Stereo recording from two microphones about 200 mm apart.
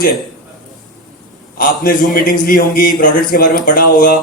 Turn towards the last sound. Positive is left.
turn(degrees=45)  # may be behind; listen again after turning